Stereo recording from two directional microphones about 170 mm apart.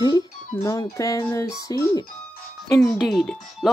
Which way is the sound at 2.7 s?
Centre (ahead or behind).